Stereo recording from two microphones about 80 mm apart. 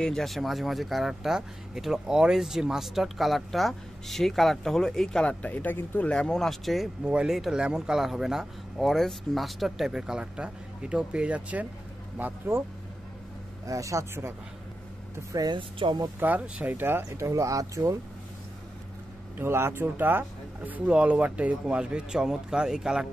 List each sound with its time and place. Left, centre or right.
0.0 s speech: centre; by 6.1 s left
6.1 s speech: centre; by 12.6 s right
13.7 s speech: right
15.5 s speech: right
16.2 s speech: centre
17.3 s speech: right
19.3 s speech: right; by 23.0 s centre